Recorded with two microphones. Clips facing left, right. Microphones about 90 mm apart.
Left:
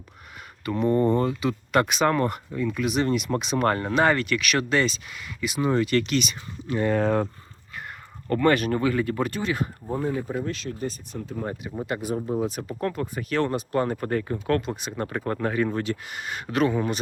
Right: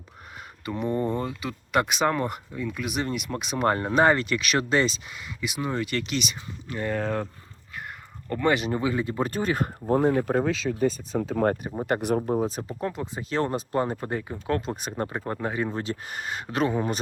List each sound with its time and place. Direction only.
0.6 s speech: 10° right (ahead or behind)
3.6 s speech: 20° right (ahead or behind)
6.7 s speech: 5° left (ahead or behind)
8.3 s speech: 10° right (ahead or behind)
9.3 s speech: 40° right (ahead or behind)
9.9 s speech: 65° right (ahead or behind)
11.1 s speech: 90° right
11.9 s speech: 55° right (ahead or behind)
12.2 s speech: 35° right (ahead or behind)
12.8 s speech: 20° right (ahead or behind)
14.0 s speech: 15° right (ahead or behind)
14.8 s speech: 45° right (ahead or behind)
15.2 s speech: 15° right (ahead or behind)